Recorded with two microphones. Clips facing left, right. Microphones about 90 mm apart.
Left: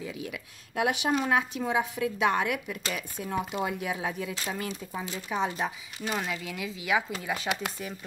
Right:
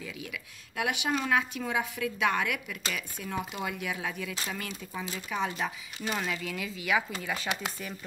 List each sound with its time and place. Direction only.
0.0 s a woman's voice: 30° left (ahead or behind)
6.0 s speech: 10° left (ahead or behind)